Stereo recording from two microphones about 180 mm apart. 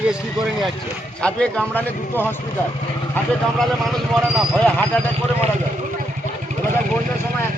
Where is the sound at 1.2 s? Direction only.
5° left (ahead or behind).